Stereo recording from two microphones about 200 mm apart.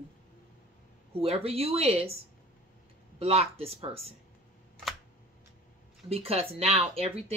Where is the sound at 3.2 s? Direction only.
30° right (ahead or behind).